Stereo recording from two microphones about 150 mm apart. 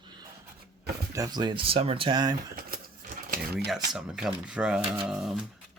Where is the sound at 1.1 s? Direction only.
25° right (ahead or behind).